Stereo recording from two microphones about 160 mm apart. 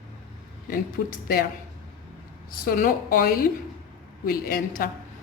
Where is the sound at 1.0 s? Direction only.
90° left.